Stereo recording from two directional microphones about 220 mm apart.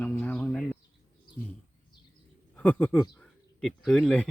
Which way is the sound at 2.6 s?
5° left (ahead or behind).